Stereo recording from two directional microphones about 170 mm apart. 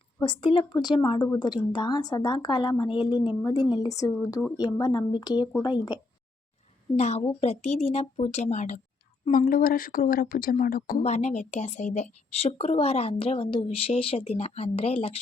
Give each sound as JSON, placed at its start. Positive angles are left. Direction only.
{"t": 0.2, "sound": "a woman's voice", "side_deg": 30}
{"t": 6.9, "sound": "speech", "side_deg": 40}
{"t": 9.3, "sound": "speech", "side_deg": 55}